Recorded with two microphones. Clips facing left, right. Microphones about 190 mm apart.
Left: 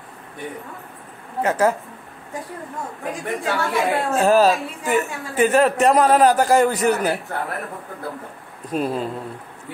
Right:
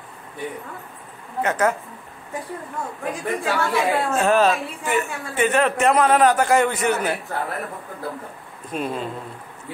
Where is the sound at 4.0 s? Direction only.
35° left (ahead or behind).